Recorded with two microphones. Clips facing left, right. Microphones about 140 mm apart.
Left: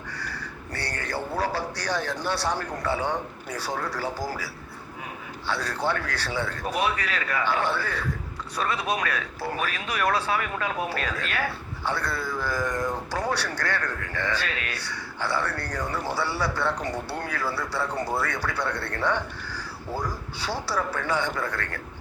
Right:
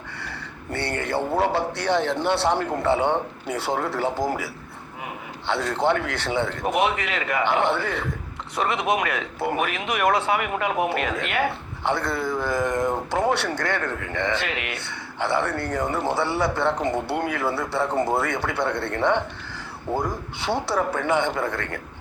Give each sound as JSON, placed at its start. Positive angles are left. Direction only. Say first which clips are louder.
{"t": 0.2, "sound": "a sound", "louder": "even", "side_deg": -25}
{"t": 2.3, "sound": "speech", "louder": "right 5 dB", "side_deg": -25}
{"t": 5.5, "sound": "speech", "louder": "right 5 dB", "side_deg": -25}